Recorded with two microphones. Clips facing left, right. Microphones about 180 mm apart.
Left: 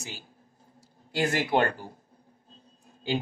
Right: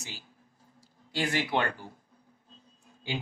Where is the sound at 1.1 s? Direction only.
45° left (ahead or behind).